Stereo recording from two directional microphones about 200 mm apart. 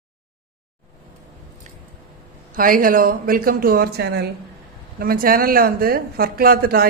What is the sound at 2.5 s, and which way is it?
Speech, 45° right (ahead or behind).